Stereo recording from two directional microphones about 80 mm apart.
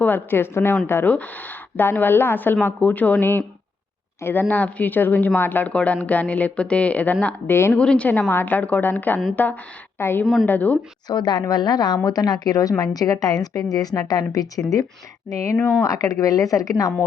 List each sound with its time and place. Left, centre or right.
0.0 s a woman's voice: left
11.1 s a woman's voice: left